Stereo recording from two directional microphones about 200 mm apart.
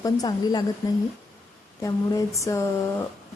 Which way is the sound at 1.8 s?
15° left (ahead or behind).